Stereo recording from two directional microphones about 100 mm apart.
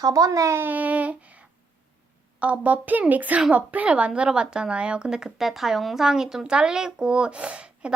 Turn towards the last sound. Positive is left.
turn(degrees=-10)  # may be behind; listen again after turning